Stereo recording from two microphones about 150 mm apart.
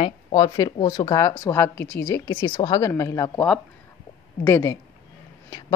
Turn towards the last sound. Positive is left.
turn(degrees=20)  # may be behind; listen again after turning